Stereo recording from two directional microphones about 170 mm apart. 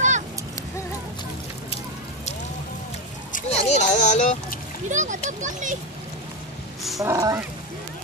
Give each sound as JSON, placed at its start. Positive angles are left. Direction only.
{"t": 3.3, "sound": "a sound", "side_deg": 40}
{"t": 4.8, "sound": "a child's voice", "side_deg": -45}
{"t": 7.0, "sound": "speech", "side_deg": -20}